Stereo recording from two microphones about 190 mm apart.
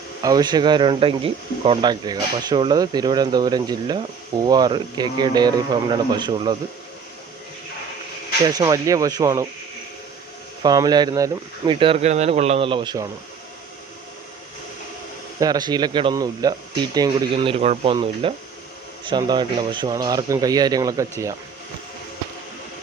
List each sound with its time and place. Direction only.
0.2 s speech: 20° right (ahead or behind)
8.4 s speech: 20° right (ahead or behind)
10.6 s speech: 20° right (ahead or behind)
15.4 s speech: 20° right (ahead or behind)